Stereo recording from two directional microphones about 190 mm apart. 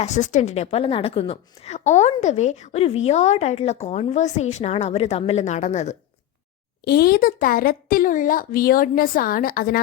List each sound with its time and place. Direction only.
0.0 s a woman's voice: 40° left (ahead or behind)
6.8 s a woman's voice: 55° left (ahead or behind)